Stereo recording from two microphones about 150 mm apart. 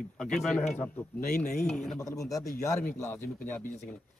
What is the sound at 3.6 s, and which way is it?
Speech, 50° left (ahead or behind).